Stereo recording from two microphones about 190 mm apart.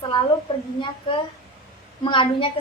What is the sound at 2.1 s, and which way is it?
Speech, 25° left (ahead or behind).